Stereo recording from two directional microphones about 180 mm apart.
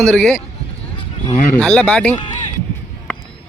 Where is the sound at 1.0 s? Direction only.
30° left (ahead or behind).